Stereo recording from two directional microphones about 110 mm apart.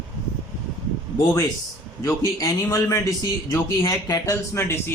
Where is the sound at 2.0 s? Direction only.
30° left (ahead or behind).